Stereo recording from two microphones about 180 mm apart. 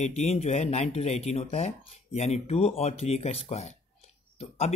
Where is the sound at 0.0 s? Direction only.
40° left (ahead or behind).